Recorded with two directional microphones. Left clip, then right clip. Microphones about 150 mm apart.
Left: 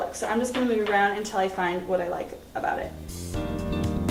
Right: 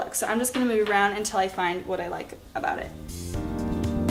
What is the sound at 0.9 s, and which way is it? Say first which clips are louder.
A woman's voice: even; 20° right (ahead or behind).